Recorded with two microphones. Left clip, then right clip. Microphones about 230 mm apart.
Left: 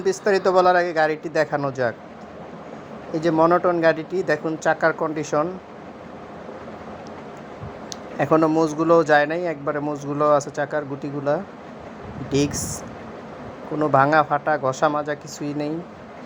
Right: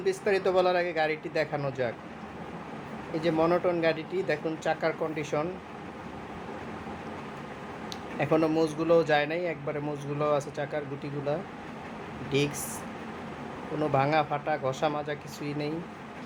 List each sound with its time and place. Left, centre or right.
0.0 s a man's voice: left
3.2 s a man's voice: left
8.2 s a man's voice: left
13.7 s a man's voice: left